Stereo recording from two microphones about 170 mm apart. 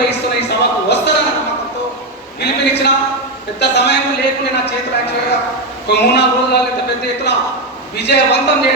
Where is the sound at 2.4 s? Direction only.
80° left.